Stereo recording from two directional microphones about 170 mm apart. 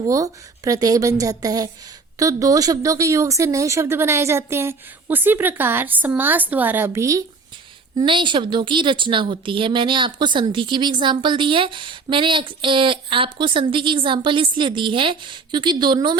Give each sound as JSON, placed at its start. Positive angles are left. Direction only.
{"t": 0.1, "sound": "a woman's voice", "side_deg": -20}
{"t": 7.9, "sound": "a woman's voice", "side_deg": -30}